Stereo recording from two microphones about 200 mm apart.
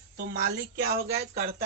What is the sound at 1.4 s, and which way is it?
Speech, 35° right (ahead or behind).